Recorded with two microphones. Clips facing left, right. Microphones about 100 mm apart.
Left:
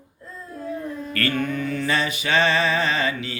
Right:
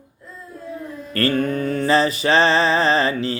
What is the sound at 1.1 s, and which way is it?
Music, 35° right (ahead or behind).